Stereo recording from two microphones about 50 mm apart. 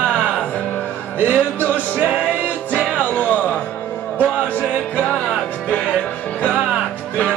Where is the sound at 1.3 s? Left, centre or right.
Left.